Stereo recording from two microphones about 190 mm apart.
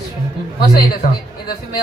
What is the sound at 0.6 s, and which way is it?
Speech, 50° left (ahead or behind).